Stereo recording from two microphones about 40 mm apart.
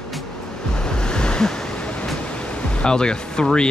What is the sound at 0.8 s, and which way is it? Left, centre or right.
Waves, left.